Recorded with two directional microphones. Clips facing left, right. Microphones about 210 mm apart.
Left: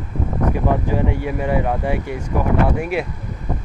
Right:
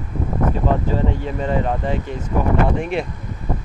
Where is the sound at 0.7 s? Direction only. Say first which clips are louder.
Left 1 dB; 15° left (ahead or behind).